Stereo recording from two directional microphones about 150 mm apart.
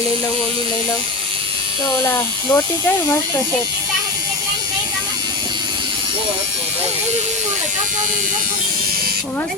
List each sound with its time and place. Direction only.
2.0 s speech: 15° left (ahead or behind)